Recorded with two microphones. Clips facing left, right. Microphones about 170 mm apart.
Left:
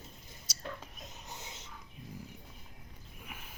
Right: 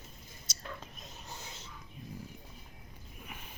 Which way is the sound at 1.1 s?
20° left (ahead or behind).